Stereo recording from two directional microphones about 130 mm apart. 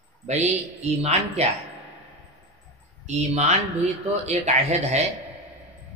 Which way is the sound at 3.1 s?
60° right (ahead or behind).